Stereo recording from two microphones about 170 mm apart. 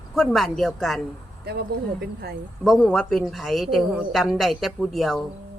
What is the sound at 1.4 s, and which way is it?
Speech, 70° right (ahead or behind).